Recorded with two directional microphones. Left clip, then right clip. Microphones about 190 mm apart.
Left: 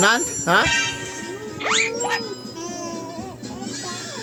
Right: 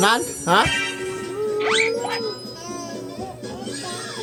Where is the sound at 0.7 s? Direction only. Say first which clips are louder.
Left 2 dB; 40° left (ahead or behind).